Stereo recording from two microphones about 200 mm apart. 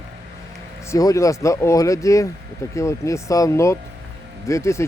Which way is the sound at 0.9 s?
15° left (ahead or behind).